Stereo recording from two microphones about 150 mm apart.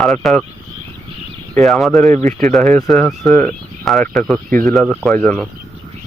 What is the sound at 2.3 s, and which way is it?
Speech, 5° left (ahead or behind).